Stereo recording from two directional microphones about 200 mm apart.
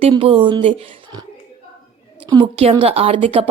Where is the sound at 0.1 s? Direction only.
25° right (ahead or behind).